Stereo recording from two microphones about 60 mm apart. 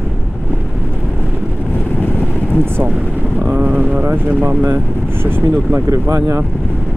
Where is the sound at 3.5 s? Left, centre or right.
Right.